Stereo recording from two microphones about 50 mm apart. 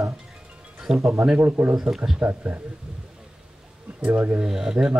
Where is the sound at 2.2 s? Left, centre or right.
Right.